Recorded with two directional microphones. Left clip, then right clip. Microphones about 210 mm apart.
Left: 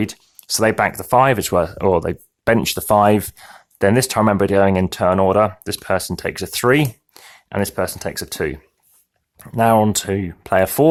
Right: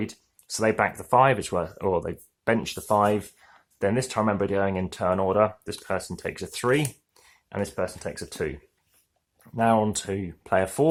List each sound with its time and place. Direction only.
0.0 s speech: 40° left (ahead or behind)